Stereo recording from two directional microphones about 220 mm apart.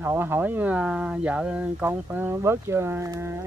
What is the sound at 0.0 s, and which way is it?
Speech, 10° right (ahead or behind).